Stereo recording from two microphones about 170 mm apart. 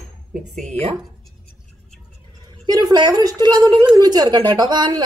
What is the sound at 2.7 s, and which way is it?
A woman's voice, 20° right (ahead or behind).